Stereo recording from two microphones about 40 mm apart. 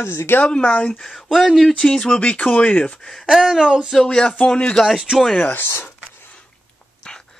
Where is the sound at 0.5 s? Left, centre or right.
Left.